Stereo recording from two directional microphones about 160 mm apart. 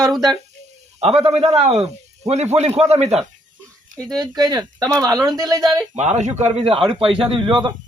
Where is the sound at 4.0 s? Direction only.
25° right (ahead or behind).